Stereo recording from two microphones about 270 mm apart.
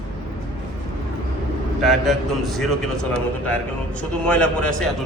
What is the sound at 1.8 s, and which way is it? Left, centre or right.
Speech, centre.